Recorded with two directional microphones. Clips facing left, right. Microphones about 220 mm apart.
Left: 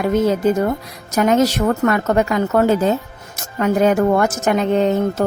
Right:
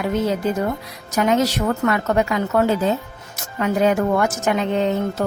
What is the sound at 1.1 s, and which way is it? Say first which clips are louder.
A woman's voice: left 3 dB; 45° left (ahead or behind).